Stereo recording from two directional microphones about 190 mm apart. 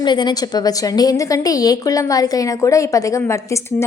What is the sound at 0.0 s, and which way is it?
A woman's voice, 25° left (ahead or behind).